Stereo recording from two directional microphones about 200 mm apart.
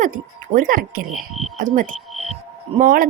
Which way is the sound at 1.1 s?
Centre (ahead or behind).